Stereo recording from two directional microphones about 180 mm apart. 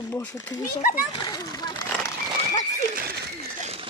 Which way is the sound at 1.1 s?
20° left (ahead or behind).